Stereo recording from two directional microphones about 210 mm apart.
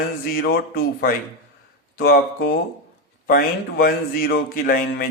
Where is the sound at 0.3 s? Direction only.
45° left (ahead or behind).